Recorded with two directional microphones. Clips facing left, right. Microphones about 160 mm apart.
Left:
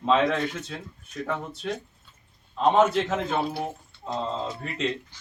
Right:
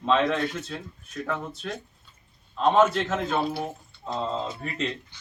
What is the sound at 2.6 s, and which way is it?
A man's voice, 10° left (ahead or behind).